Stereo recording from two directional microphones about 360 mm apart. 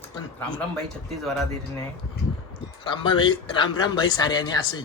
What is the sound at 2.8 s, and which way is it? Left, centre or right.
Speech, centre.